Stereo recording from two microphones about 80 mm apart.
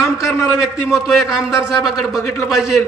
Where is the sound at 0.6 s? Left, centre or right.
Centre.